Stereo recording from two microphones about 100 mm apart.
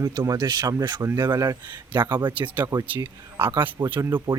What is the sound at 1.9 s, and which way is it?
Speech, 50° right (ahead or behind).